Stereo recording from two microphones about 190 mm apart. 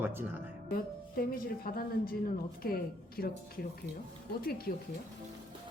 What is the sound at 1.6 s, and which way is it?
A woman's voice, 50° left (ahead or behind).